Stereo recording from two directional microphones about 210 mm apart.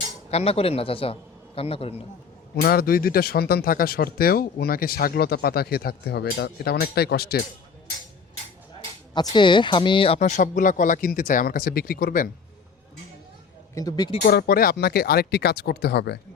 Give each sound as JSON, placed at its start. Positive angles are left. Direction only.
{"t": 0.3, "sound": "a man's voice", "side_deg": 30}
{"t": 2.6, "sound": "speech", "side_deg": 45}
{"t": 9.1, "sound": "speech", "side_deg": 20}
{"t": 13.7, "sound": "a man's voice", "side_deg": 20}
{"t": 14.3, "sound": "speech", "side_deg": 45}